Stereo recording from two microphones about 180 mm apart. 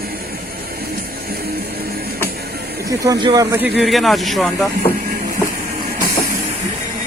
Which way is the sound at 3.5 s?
5° right (ahead or behind).